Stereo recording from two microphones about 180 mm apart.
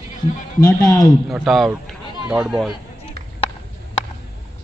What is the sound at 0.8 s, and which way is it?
Speech, 20° left (ahead or behind).